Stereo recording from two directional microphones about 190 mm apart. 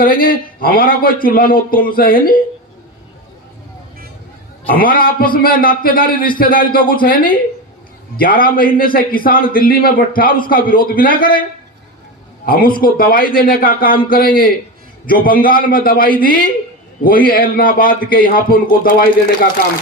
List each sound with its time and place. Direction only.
0.0 s speech: 50° left (ahead or behind)
4.8 s speech: 50° left (ahead or behind)
12.5 s speech: 50° left (ahead or behind)